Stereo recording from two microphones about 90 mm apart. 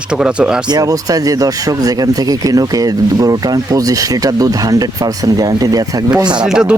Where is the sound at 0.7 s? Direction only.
40° right (ahead or behind).